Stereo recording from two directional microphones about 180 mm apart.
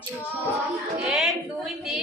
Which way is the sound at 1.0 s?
Centre (ahead or behind).